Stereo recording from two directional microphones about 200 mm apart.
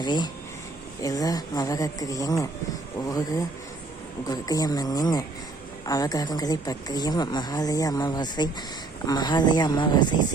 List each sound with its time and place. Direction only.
0.0 s speech: 20° left (ahead or behind)